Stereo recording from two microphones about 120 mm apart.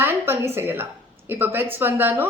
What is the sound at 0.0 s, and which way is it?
A woman's voice, 20° right (ahead or behind).